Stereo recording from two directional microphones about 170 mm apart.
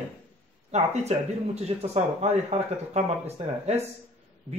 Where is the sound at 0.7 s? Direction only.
40° right (ahead or behind).